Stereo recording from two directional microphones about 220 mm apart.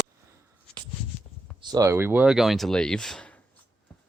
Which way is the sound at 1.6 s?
20° right (ahead or behind).